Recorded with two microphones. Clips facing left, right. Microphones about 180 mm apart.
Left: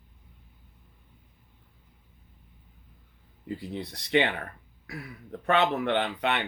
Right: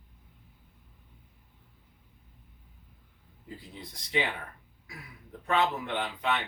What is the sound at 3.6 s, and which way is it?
Speech, 65° left (ahead or behind).